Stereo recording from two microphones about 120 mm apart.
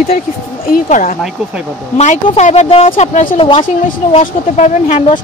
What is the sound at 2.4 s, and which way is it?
Speech, 65° left (ahead or behind).